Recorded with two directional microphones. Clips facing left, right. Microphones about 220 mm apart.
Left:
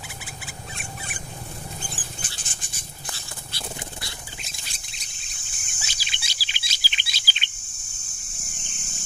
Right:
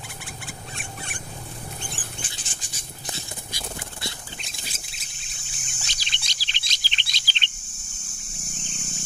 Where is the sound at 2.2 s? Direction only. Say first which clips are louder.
Left 1 dB; 45° left (ahead or behind).